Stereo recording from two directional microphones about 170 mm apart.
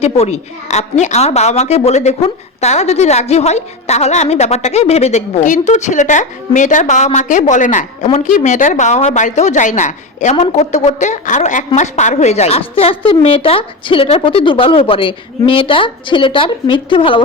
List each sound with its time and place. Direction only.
0.0 s a woman's voice: 40° left (ahead or behind)